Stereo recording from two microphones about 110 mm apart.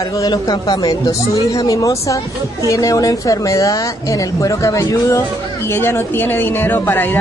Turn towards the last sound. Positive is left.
turn(degrees=20)  # may be behind; listen again after turning